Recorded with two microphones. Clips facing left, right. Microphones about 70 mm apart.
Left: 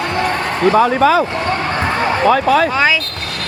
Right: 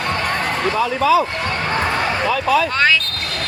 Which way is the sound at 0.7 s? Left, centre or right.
Left.